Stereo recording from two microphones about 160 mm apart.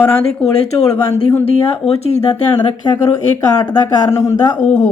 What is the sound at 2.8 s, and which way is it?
Speech, 30° left (ahead or behind).